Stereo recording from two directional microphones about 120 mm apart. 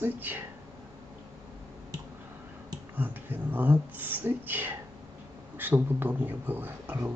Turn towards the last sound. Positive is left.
turn(degrees=-15)  # may be behind; listen again after turning